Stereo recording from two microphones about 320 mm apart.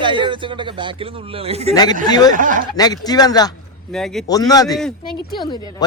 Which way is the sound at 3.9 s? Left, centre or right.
Centre.